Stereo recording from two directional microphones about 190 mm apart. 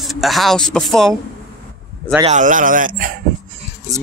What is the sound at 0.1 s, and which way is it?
Speech, centre (ahead or behind).